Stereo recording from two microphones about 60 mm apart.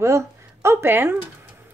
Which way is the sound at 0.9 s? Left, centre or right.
Right.